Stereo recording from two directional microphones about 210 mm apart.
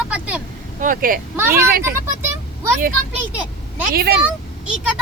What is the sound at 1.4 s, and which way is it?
Speech, 10° right (ahead or behind).